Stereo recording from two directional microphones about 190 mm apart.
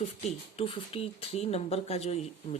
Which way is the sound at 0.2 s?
35° left (ahead or behind).